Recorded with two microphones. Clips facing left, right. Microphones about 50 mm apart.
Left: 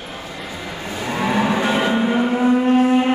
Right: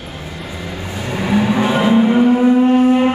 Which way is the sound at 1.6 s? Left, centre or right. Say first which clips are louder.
Right 5 dB; centre.